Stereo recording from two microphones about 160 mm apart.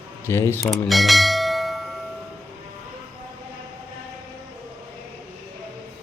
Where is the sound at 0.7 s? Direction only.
Centre (ahead or behind).